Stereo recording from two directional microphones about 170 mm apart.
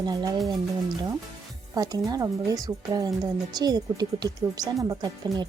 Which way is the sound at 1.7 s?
20° right (ahead or behind).